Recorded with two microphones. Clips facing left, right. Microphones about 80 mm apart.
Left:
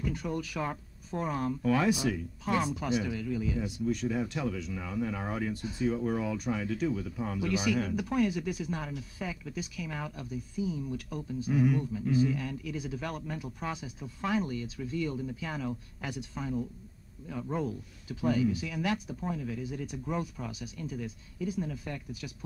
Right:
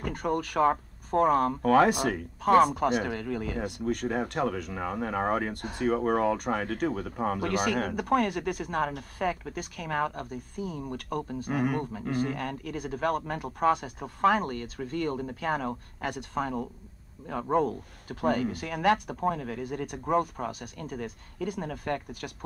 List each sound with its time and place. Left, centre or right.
0.0 s speech: right